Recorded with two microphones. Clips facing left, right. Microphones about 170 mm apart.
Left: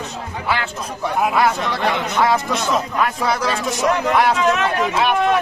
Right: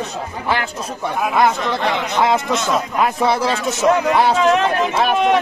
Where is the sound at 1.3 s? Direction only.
20° right (ahead or behind).